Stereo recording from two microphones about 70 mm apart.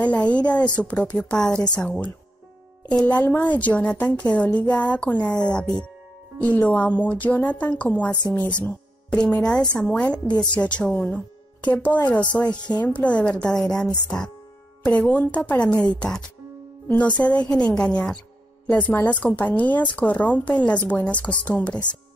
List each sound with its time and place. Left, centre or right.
0.0 s a woman's voice: centre
2.9 s a woman's voice: centre